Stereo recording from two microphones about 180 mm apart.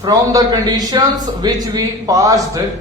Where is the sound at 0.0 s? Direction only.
20° right (ahead or behind).